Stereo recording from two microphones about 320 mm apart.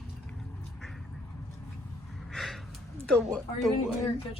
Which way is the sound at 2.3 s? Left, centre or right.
Centre.